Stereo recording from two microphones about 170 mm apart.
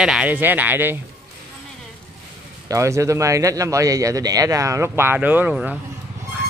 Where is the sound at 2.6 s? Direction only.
20° right (ahead or behind).